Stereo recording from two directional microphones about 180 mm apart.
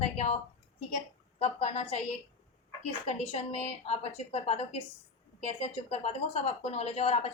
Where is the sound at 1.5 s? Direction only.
35° left (ahead or behind).